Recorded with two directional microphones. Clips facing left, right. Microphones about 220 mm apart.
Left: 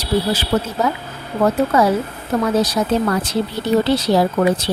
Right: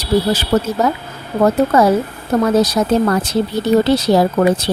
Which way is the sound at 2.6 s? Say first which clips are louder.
Right 3 dB; 45° right (ahead or behind).